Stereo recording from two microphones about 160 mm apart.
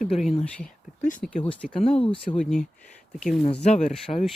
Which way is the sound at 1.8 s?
35° left (ahead or behind).